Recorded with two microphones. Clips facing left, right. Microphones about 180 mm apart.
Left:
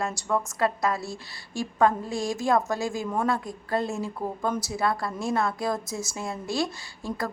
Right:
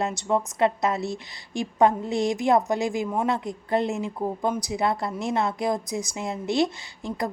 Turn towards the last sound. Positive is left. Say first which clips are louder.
# right 2 dB
turn(degrees=-20)  # may be behind; listen again after turning